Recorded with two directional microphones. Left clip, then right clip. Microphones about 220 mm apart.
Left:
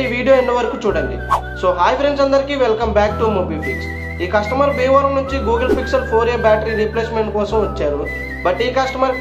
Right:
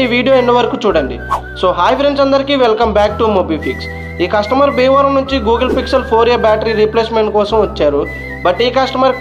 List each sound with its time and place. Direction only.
0.0 s speech: 40° right (ahead or behind)